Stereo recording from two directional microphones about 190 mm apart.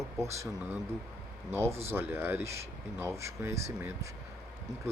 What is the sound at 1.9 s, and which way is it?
Speech, 10° right (ahead or behind).